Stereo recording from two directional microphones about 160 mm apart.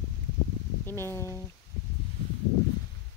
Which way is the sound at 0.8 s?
15° left (ahead or behind).